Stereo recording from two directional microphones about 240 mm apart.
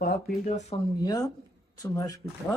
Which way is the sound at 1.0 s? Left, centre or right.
Centre.